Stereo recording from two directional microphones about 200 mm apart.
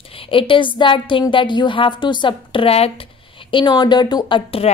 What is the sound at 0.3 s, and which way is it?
Speech, 25° left (ahead or behind).